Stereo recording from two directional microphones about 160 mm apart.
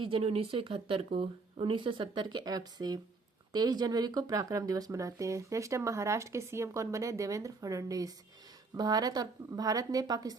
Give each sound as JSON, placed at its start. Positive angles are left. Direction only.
{"t": 0.0, "sound": "speech", "side_deg": -35}